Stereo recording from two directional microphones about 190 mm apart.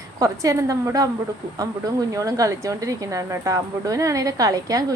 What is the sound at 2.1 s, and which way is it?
Speech, 15° right (ahead or behind).